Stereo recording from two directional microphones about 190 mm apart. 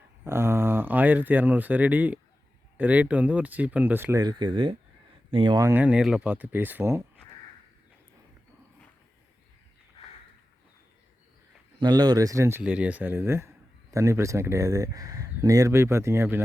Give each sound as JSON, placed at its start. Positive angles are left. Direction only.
{"t": 0.3, "sound": "speech", "side_deg": -10}
{"t": 11.8, "sound": "speech", "side_deg": -20}